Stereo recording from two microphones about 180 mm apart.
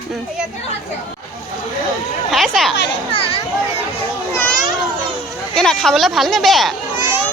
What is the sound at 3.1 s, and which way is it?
Speech, 30° left (ahead or behind).